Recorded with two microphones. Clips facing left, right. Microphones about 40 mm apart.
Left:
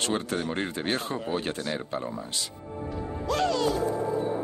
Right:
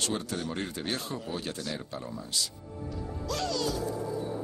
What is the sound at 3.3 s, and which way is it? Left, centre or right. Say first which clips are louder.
Music: left 6 dB; left.